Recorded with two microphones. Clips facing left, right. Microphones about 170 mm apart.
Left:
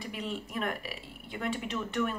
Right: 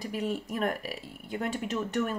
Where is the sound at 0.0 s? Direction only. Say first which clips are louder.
Right 5 dB; 45° right (ahead or behind).